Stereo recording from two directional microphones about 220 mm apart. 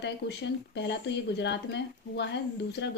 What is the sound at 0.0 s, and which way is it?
Speech, 50° left (ahead or behind).